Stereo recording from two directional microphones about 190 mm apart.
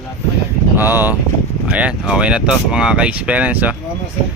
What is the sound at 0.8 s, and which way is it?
Speech, 10° right (ahead or behind).